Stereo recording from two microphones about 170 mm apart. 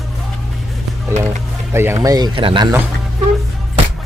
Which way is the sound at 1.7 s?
15° right (ahead or behind).